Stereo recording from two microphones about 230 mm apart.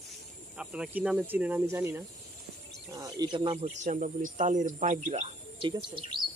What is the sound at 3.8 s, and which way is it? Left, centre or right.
Speech, right.